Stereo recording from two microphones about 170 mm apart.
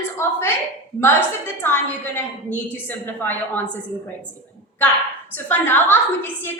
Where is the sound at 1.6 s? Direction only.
10° left (ahead or behind).